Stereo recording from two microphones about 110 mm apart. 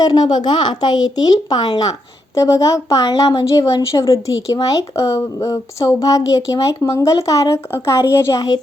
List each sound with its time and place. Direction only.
0.0 s a woman's voice: 40° left (ahead or behind)